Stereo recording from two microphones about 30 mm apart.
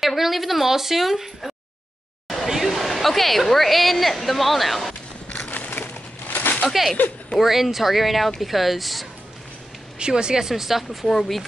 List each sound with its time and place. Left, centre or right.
0.0 s speech: centre
5.5 s a sound: left
7.3 s speech: centre
9.9 s speech: right
10.5 s speech: centre
11.1 s speech: centre